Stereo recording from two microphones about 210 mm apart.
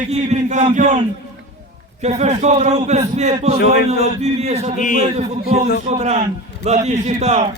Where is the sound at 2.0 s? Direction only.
30° right (ahead or behind).